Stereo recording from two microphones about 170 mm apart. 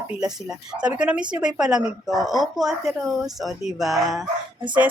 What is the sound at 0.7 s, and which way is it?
A woman's voice, 5° right (ahead or behind).